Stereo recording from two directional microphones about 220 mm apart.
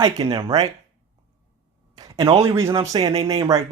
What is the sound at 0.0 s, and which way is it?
Speech, 20° right (ahead or behind).